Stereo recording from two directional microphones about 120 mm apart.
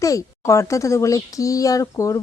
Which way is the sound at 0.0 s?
30° left (ahead or behind).